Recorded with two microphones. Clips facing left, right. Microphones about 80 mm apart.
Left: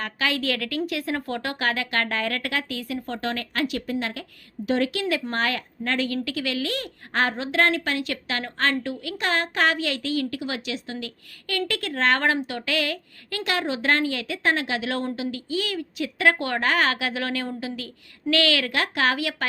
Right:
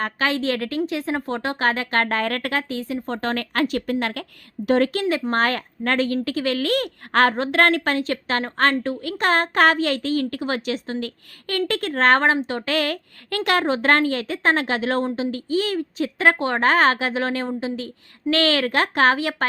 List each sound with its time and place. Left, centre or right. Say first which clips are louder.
0.0 s a woman's voice: right 4 dB; right
3.2 s a woman's voice: right 5 dB; right
5.0 s speech: right 4 dB; right
5.3 s a woman's voice: right 5 dB; right
12.2 s a woman's voice: right 4 dB; right